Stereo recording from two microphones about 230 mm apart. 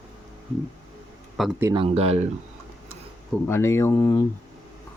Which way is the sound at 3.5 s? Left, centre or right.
Centre.